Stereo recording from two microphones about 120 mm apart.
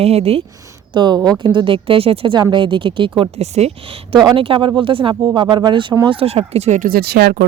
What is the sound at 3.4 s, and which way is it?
Speech, 65° right (ahead or behind).